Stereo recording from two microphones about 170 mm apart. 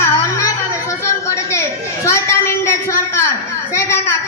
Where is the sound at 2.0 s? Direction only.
15° left (ahead or behind).